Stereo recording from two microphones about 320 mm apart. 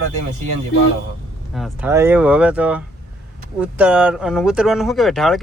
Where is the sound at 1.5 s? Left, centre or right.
Centre.